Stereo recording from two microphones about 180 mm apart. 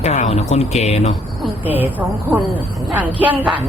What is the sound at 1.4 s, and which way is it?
Speech, 10° right (ahead or behind).